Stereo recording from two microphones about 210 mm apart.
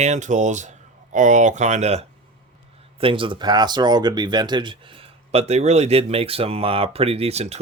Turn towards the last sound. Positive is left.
turn(degrees=-30)  # may be behind; listen again after turning